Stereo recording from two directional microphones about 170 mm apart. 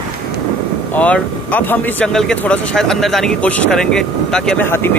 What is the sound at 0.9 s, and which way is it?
A man's voice, 10° left (ahead or behind).